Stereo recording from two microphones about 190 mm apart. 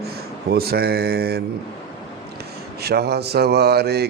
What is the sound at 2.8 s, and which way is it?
Speech, 60° right (ahead or behind).